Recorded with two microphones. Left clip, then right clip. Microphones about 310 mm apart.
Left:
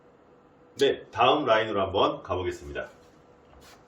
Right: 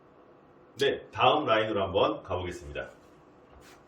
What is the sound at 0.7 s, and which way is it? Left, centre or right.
Speech, centre.